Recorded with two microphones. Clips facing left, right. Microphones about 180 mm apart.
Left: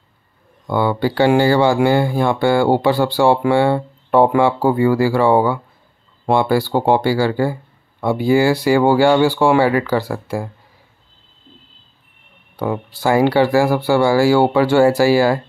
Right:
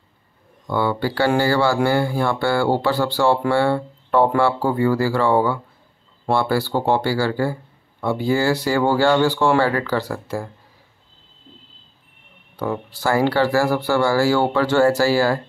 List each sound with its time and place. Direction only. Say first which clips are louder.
0.7 s speech: left 4 dB; 15° left (ahead or behind)
12.5 s speech: left 3 dB; 15° left (ahead or behind)